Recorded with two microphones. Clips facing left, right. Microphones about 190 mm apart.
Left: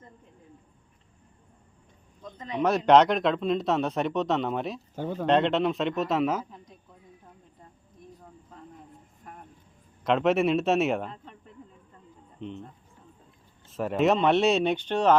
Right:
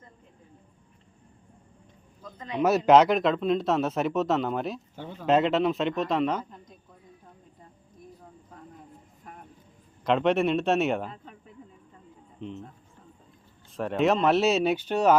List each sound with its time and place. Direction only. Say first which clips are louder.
2.6 s speech: right 1 dB; 5° right (ahead or behind)
4.9 s speech: left 8 dB; 45° left (ahead or behind)
5.2 s speech: right 1 dB; 5° right (ahead or behind)
9.2 s cricket: even; centre (ahead or behind)
10.0 s a man's voice: even; centre (ahead or behind)